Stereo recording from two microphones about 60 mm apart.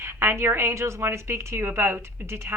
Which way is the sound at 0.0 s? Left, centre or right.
Right.